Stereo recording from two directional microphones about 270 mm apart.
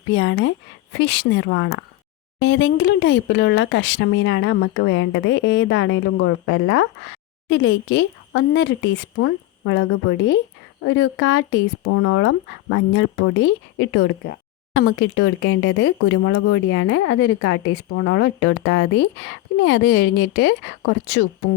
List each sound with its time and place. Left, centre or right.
0.1 s speech: left